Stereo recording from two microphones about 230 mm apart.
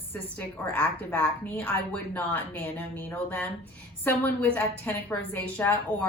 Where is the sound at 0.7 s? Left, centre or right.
Centre.